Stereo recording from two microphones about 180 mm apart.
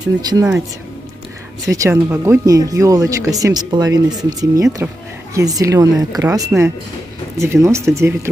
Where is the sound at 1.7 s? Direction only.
15° right (ahead or behind).